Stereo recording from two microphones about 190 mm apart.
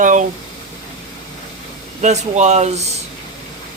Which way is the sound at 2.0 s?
35° right (ahead or behind).